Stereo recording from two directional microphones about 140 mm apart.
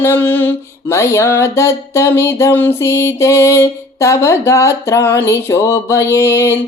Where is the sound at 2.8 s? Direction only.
20° left (ahead or behind).